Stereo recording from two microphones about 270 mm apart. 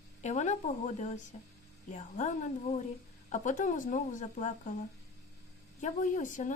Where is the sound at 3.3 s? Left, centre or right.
Left.